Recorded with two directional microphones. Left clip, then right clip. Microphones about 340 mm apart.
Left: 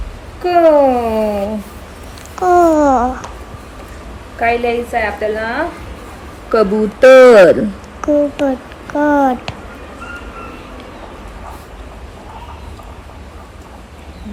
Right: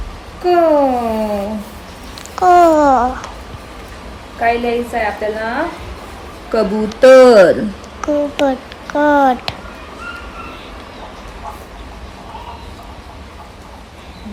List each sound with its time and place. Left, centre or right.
0.4 s cat: centre
2.3 s babbling: centre
4.4 s a woman's voice: centre